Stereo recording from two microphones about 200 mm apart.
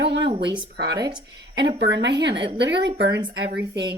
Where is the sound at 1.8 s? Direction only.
60° right (ahead or behind).